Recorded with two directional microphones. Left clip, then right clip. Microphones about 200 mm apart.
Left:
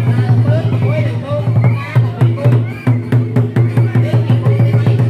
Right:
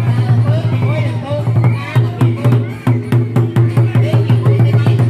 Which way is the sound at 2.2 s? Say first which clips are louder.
Left 1 dB; 35° right (ahead or behind).